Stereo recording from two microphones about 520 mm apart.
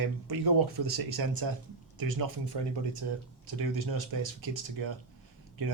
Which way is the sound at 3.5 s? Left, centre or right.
Right.